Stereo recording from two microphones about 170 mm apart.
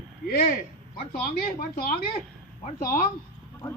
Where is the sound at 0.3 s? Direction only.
60° left (ahead or behind).